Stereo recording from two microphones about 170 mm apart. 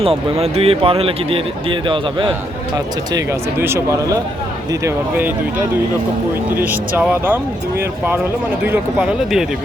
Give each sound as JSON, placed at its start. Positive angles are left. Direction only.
{"t": 0.0, "sound": "speech", "side_deg": -35}
{"t": 6.6, "sound": "speech", "side_deg": -10}